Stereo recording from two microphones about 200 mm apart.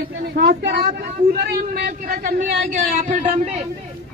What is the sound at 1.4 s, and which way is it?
Speech, 50° right (ahead or behind).